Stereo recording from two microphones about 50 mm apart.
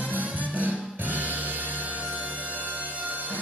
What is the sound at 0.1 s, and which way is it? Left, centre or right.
Music, right.